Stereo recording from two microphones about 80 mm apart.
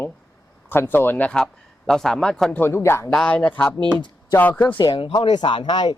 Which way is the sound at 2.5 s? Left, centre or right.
Left.